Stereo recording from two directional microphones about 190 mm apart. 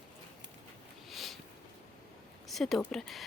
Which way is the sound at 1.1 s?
Centre (ahead or behind).